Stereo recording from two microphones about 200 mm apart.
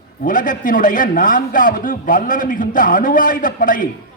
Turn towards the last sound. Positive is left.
turn(degrees=40)  # may be behind; listen again after turning